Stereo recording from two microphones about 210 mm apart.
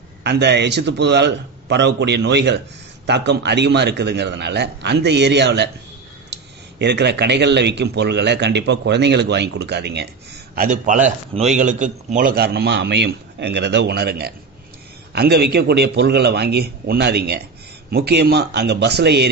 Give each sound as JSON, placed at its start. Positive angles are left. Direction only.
{"t": 0.2, "sound": "a man's voice", "side_deg": -55}
{"t": 10.5, "sound": "a man's voice", "side_deg": -40}